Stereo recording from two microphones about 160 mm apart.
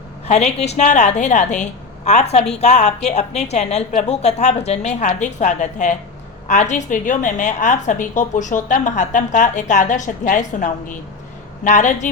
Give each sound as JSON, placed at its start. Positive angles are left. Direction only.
{"t": 0.3, "sound": "a woman's voice", "side_deg": 45}